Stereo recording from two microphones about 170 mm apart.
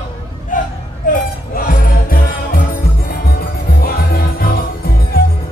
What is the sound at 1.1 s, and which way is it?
Music, 55° left (ahead or behind).